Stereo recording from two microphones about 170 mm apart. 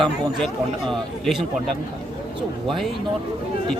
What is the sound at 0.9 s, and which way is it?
Speech, centre (ahead or behind).